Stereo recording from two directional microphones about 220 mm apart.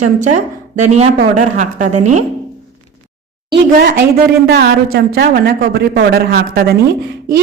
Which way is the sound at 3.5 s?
45° right (ahead or behind).